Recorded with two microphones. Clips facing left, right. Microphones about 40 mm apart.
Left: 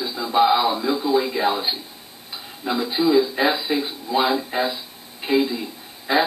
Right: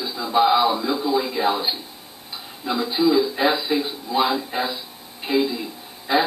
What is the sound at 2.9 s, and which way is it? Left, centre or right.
Speech, centre.